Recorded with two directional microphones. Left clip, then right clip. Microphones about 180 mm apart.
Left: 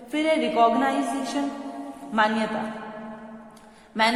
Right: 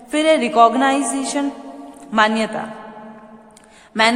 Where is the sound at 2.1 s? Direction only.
35° right (ahead or behind).